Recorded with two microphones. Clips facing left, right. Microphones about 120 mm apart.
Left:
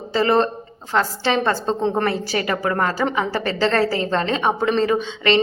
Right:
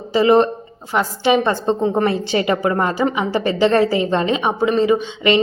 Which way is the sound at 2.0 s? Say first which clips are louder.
Right 4 dB; 20° right (ahead or behind).